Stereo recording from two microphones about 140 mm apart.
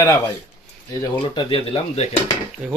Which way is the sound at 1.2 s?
35° left (ahead or behind).